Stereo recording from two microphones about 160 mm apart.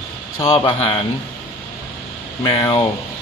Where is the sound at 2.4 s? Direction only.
35° left (ahead or behind).